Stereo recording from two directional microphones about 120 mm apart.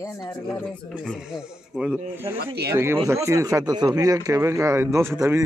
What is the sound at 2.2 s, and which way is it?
Speech, 20° right (ahead or behind).